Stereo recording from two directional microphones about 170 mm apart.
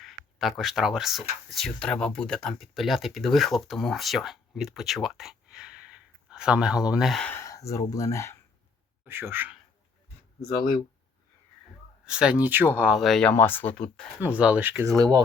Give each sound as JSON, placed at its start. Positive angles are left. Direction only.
{"t": 0.0, "sound": "speech", "side_deg": 0}
{"t": 7.3, "sound": "speech", "side_deg": 20}
{"t": 9.0, "sound": "speech", "side_deg": -15}
{"t": 10.4, "sound": "speech", "side_deg": 25}
{"t": 12.0, "sound": "speech", "side_deg": -5}
{"t": 14.2, "sound": "speech", "side_deg": -10}
{"t": 14.9, "sound": "speech", "side_deg": -20}